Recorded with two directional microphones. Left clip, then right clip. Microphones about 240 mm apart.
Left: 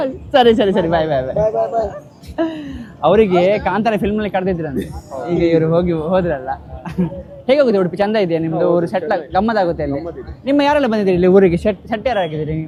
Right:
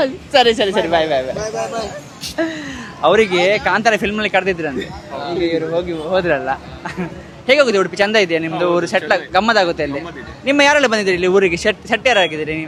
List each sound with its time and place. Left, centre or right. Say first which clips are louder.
0.3 s speech: left 2 dB; centre
1.4 s speech: left 6 dB; right
2.3 s speech: left 1 dB; centre
5.4 s speech: left 4 dB; centre
6.2 s speech: right 3 dB; centre